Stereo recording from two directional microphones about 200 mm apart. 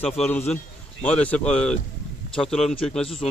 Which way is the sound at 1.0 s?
5° left (ahead or behind).